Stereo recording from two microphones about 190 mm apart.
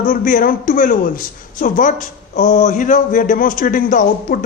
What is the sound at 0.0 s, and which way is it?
A man's voice, 45° left (ahead or behind).